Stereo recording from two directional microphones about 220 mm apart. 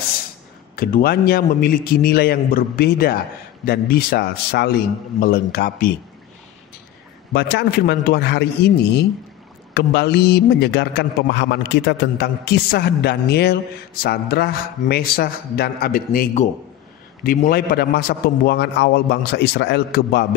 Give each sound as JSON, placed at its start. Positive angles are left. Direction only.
{"t": 0.7, "sound": "a man's voice", "side_deg": 40}
{"t": 7.3, "sound": "a man's voice", "side_deg": 50}